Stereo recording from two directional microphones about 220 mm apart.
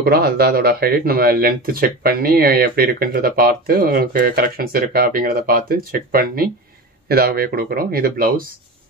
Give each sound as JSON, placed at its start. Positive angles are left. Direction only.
{"t": 0.0, "sound": "speech", "side_deg": -45}